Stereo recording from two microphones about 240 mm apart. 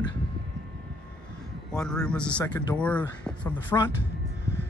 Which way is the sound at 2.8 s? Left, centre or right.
Centre.